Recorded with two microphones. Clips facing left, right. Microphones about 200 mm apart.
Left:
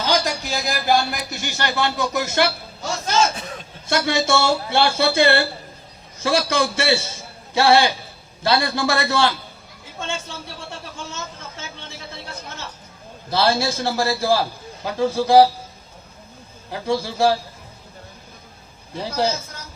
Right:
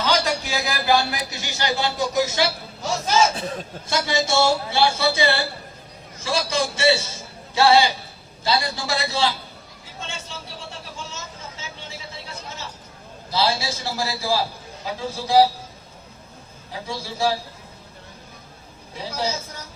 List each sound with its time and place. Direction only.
0.0 s a man's voice: 45° left (ahead or behind)
3.3 s a man's voice: 35° right (ahead or behind)
3.8 s speech: 60° left (ahead or behind)
13.3 s speech: 55° left (ahead or behind)
16.7 s speech: 60° left (ahead or behind)
18.9 s speech: 60° left (ahead or behind)